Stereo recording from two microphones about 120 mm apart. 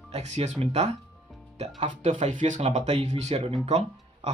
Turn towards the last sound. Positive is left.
turn(degrees=-60)  # may be behind; listen again after turning